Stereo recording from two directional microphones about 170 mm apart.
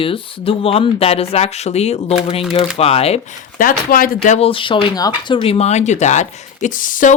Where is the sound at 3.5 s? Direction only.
55° left (ahead or behind).